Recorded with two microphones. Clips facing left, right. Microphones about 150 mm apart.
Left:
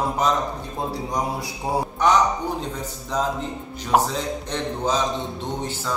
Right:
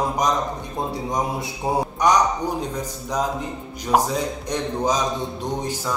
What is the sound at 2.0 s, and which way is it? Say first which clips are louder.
Speech: even; 15° right (ahead or behind).